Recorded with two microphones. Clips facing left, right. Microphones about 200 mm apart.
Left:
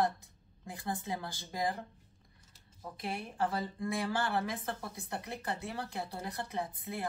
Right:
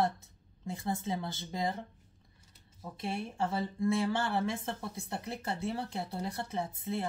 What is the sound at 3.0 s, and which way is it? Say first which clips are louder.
Speech: right 1 dB; 25° right (ahead or behind).